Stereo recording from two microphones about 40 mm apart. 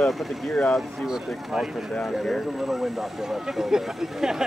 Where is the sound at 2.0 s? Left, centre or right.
Centre.